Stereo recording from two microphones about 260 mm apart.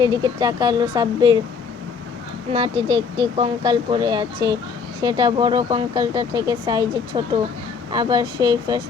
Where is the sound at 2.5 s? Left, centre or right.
Centre.